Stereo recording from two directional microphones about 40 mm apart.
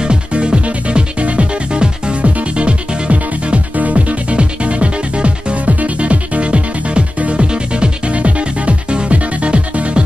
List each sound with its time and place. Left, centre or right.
0.0 s music: right